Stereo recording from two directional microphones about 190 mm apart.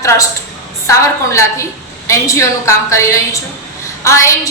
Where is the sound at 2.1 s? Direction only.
15° left (ahead or behind).